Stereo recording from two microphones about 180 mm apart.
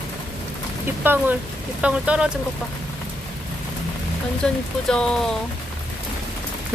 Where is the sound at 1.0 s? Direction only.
10° right (ahead or behind).